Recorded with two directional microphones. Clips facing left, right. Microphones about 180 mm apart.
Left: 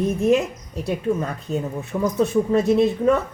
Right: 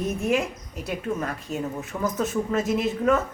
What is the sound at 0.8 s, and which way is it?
A woman's voice, 30° left (ahead or behind).